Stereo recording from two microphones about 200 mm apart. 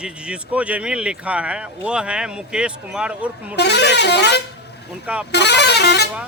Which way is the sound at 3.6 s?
60° left (ahead or behind).